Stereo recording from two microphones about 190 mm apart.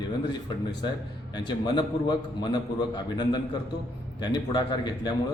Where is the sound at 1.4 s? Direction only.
25° left (ahead or behind).